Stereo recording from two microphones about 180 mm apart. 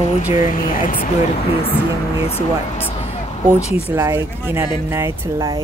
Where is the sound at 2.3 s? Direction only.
10° left (ahead or behind).